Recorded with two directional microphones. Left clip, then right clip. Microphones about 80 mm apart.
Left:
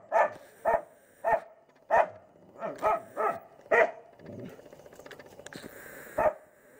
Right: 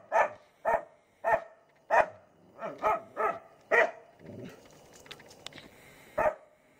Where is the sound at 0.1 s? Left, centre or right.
Centre.